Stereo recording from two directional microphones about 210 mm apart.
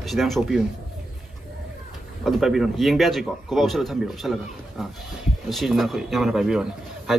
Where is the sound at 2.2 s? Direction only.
Centre (ahead or behind).